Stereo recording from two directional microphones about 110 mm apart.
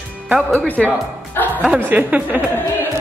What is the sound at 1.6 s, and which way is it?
Speech, 15° right (ahead or behind).